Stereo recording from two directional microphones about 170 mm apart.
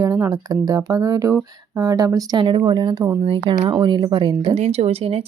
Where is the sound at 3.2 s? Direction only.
30° right (ahead or behind).